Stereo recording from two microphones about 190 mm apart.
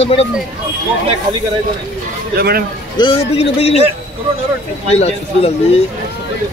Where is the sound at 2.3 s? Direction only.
50° right (ahead or behind).